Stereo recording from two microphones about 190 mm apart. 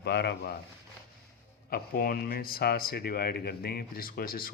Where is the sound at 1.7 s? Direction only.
50° left (ahead or behind).